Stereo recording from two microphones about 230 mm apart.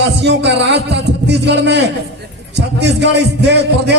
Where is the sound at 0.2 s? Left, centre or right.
Right.